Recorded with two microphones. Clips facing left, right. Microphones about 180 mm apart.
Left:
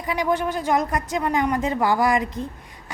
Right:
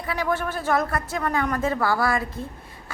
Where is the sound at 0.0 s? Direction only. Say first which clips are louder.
Left 3 dB; 15° left (ahead or behind).